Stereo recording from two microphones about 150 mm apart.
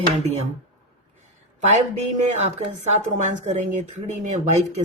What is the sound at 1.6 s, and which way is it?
Speech, 50° right (ahead or behind).